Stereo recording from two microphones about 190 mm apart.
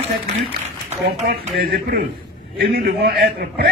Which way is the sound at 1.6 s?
50° right (ahead or behind).